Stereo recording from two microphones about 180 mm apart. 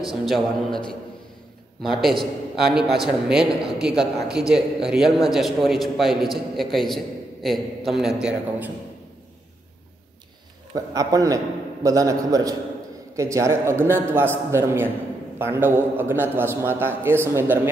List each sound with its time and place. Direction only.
0.0 s a man's voice: centre (ahead or behind)
10.7 s a man's voice: 20° right (ahead or behind)